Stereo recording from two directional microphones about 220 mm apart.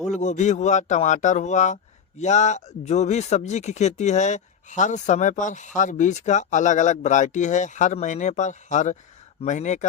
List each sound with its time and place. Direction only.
0.1 s speech: 30° left (ahead or behind)